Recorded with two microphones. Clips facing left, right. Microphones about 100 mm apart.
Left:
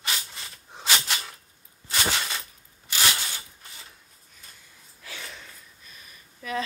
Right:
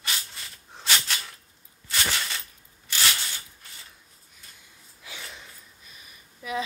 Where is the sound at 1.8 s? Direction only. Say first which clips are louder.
Left 2 dB; 20° left (ahead or behind).